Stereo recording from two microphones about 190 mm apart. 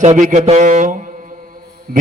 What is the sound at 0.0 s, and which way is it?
A man's voice, 40° right (ahead or behind).